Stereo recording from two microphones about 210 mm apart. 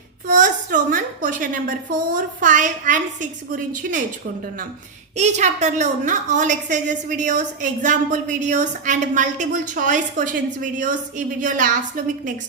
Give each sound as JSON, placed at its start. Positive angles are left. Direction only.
{"t": 0.3, "sound": "a woman's voice", "side_deg": -35}
{"t": 5.1, "sound": "a woman's voice", "side_deg": -35}